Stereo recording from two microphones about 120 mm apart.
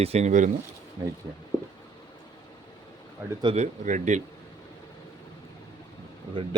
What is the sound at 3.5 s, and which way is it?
Speech, 85° right.